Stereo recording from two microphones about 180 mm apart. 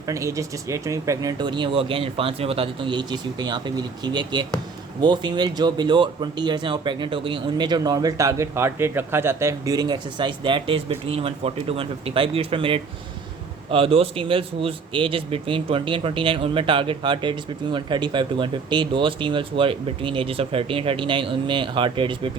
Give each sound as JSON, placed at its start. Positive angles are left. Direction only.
{"t": 0.1, "sound": "speech", "side_deg": -15}